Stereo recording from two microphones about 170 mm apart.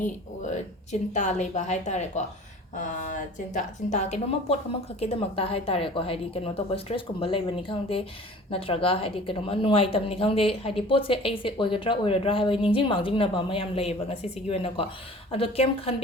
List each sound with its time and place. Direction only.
0.5 s speech: 45° left (ahead or behind)